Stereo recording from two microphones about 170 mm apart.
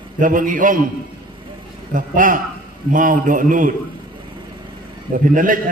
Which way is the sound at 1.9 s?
50° right (ahead or behind).